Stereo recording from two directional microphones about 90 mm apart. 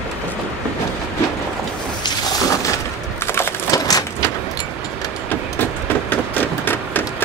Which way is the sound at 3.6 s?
40° left (ahead or behind).